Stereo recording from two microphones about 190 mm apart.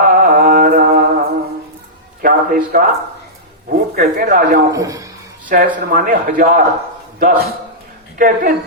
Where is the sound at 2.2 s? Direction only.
50° right (ahead or behind).